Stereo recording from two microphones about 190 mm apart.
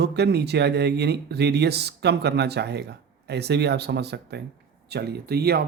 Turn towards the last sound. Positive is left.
turn(degrees=-55)  # may be behind; listen again after turning